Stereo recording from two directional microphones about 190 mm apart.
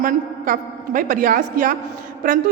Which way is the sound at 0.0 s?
45° right (ahead or behind).